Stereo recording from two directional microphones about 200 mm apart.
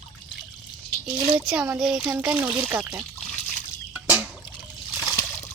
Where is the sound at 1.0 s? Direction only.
Centre (ahead or behind).